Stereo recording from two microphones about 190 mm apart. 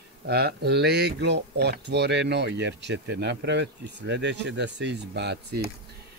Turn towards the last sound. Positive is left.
turn(degrees=-60)  # may be behind; listen again after turning